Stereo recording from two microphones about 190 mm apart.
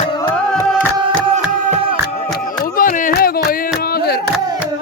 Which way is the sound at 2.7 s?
45° left (ahead or behind).